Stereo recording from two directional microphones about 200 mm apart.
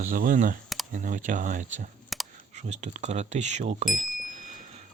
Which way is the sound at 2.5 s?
35° right (ahead or behind).